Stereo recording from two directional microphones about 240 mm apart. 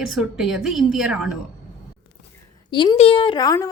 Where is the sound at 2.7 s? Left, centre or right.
Centre.